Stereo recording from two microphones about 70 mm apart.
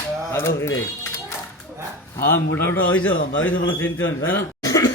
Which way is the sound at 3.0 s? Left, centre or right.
Left.